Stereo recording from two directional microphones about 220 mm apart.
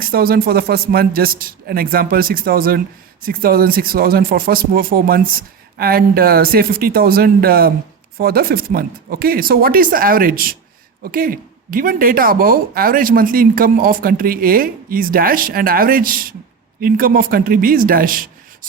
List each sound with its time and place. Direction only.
0.0 s speech: 45° right (ahead or behind)